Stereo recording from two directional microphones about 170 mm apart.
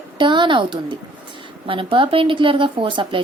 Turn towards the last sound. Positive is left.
turn(degrees=-30)  # may be behind; listen again after turning